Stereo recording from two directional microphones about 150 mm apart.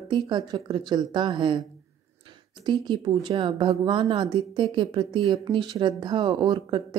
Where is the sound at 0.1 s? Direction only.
30° right (ahead or behind).